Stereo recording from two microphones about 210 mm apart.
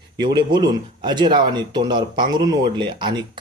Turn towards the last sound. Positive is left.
turn(degrees=-20)  # may be behind; listen again after turning